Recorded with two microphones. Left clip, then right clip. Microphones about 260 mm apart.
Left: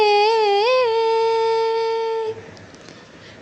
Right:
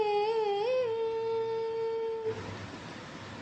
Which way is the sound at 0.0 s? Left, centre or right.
Left.